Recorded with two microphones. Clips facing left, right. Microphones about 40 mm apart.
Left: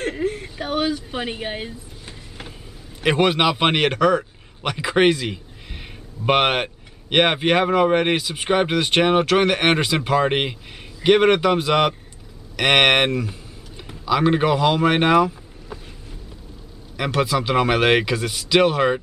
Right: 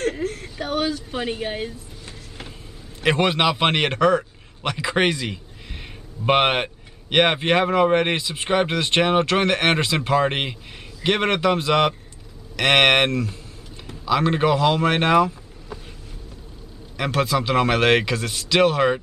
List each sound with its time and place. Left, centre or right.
0.0 s whimper: centre
3.0 s a man's voice: centre
13.1 s speech: centre
16.9 s speech: centre